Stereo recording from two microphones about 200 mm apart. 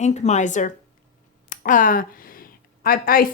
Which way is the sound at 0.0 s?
35° left (ahead or behind).